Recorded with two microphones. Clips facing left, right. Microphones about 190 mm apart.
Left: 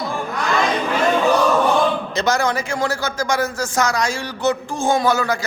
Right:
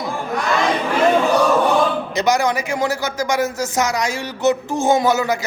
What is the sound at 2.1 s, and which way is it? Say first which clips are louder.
A man's voice: right 5 dB; 15° right (ahead or behind).